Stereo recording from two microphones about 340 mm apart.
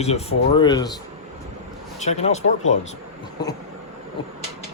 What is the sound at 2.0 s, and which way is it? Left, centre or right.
Speech, centre.